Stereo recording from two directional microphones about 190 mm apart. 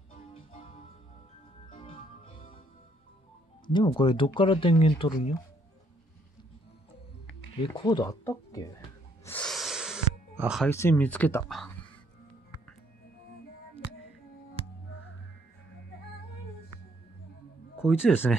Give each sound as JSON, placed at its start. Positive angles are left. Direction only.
{"t": 0.1, "sound": "music", "side_deg": 30}
{"t": 3.7, "sound": "speech", "side_deg": 25}
{"t": 7.6, "sound": "speech", "side_deg": 25}
{"t": 9.2, "sound": "a sound", "side_deg": 5}
{"t": 10.7, "sound": "speech", "side_deg": 10}
{"t": 17.7, "sound": "speech", "side_deg": -5}